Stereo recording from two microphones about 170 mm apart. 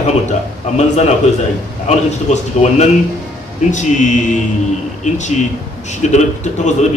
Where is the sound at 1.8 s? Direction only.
40° left (ahead or behind).